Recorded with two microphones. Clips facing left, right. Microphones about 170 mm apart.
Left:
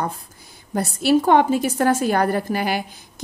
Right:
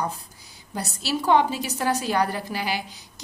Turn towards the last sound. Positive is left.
turn(degrees=50)  # may be behind; listen again after turning